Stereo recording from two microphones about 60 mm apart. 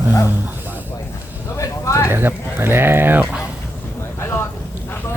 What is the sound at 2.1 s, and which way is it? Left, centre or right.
Speech, right.